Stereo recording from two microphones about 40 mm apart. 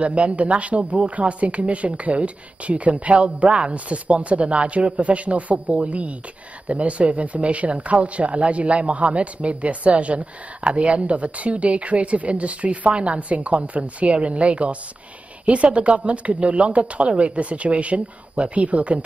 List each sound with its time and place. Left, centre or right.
0.0 s speech: right